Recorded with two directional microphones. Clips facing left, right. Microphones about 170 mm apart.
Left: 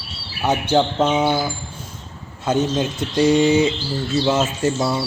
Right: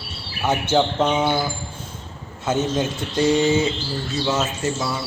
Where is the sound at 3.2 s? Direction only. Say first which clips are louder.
Left 3 dB; 25° left (ahead or behind).